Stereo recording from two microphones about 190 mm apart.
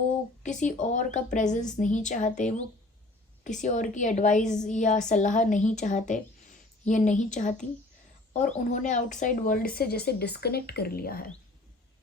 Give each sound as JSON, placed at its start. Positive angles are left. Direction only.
{"t": 0.4, "sound": "a woman's voice", "side_deg": 40}